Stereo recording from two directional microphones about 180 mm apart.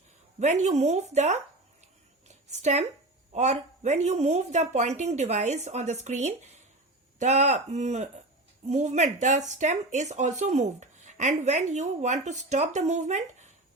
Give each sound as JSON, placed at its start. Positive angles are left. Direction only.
{"t": 0.3, "sound": "speech", "side_deg": -40}
{"t": 2.2, "sound": "a sound", "side_deg": -40}
{"t": 3.3, "sound": "speech", "side_deg": -40}